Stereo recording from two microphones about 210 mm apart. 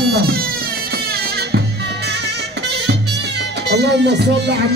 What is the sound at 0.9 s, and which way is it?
Music, 50° right (ahead or behind).